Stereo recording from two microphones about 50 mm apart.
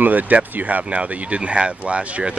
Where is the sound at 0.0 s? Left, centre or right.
Right.